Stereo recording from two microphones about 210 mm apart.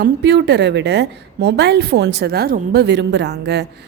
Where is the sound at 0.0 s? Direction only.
55° right (ahead or behind).